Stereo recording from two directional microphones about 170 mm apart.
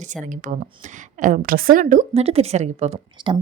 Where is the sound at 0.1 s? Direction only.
45° right (ahead or behind).